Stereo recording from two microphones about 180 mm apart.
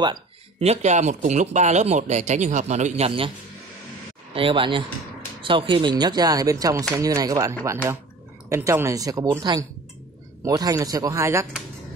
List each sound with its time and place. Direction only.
0.0 s a sound: 25° right (ahead or behind)
0.7 s a man's voice: 40° right (ahead or behind)
4.3 s speech: 30° right (ahead or behind)